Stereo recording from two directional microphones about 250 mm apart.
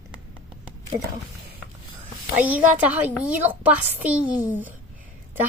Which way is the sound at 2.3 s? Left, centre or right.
Centre.